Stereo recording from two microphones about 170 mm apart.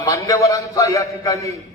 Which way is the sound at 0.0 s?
20° left (ahead or behind).